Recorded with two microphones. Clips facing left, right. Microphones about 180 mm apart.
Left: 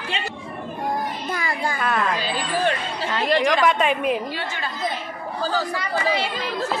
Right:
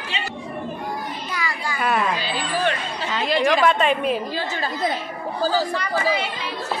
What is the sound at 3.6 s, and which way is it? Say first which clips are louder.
Speech: right 1 dB; 10° left (ahead or behind).